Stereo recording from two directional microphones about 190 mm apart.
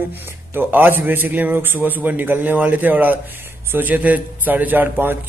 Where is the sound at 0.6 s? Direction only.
10° right (ahead or behind).